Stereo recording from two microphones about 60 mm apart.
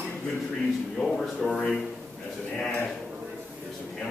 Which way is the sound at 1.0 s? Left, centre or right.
Centre.